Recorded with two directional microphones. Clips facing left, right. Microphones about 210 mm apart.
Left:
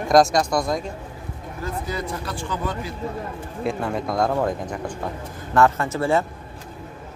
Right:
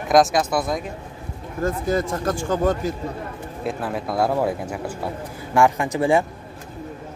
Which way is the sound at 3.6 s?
Centre (ahead or behind).